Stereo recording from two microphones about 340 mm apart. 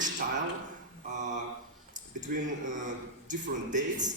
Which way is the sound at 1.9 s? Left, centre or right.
Right.